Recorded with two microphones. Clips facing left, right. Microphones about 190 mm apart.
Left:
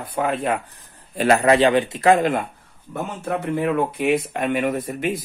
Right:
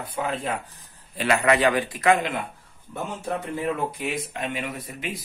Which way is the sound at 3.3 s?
65° left (ahead or behind).